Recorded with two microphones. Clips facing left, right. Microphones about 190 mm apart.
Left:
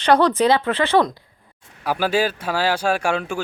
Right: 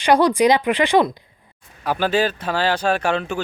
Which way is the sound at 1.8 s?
10° left (ahead or behind).